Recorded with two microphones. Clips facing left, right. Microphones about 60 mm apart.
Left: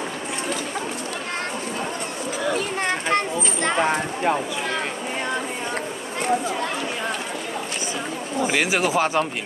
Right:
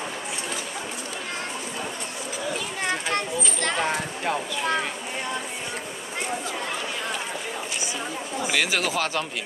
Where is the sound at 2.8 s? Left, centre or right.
Left.